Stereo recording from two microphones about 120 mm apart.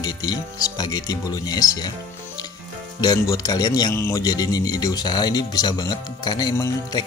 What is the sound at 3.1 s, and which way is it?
Speech, 30° left (ahead or behind).